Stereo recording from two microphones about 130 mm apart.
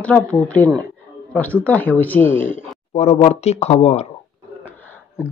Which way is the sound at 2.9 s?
55° left (ahead or behind).